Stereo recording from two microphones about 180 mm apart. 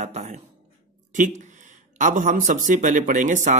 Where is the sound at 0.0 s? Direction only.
40° right (ahead or behind).